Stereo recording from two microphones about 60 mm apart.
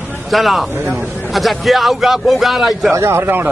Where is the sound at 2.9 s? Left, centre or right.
Right.